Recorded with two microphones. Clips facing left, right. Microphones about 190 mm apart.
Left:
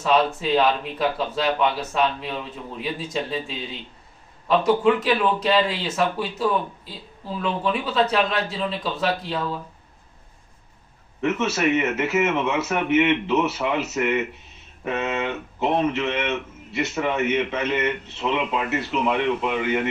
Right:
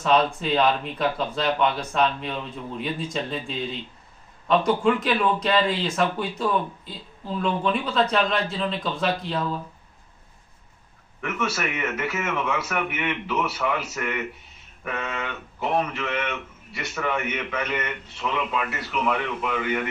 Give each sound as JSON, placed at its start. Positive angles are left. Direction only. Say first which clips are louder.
{"t": 0.0, "sound": "speech", "louder": "left 1 dB", "side_deg": 0}
{"t": 11.1, "sound": "a man's voice", "louder": "left 5 dB", "side_deg": 25}